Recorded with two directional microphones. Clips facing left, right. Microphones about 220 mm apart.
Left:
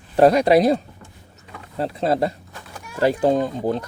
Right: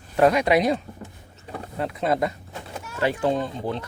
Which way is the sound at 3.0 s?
40° left (ahead or behind).